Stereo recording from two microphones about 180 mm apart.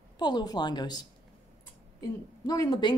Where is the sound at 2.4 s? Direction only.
20° left (ahead or behind).